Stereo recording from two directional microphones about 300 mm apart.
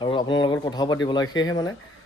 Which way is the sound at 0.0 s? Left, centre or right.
Centre.